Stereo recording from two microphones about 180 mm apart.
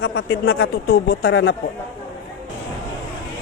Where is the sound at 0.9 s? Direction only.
70° left (ahead or behind); by 1.6 s 90° left.